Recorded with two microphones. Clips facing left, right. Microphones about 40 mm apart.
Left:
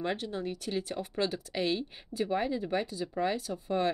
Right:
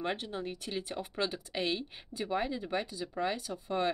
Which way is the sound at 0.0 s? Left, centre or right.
Right.